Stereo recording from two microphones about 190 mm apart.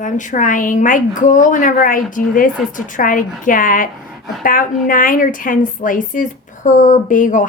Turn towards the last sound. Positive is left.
turn(degrees=45)  # may be behind; listen again after turning